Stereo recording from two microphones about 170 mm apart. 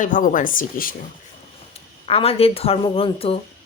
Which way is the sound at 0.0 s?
50° left (ahead or behind).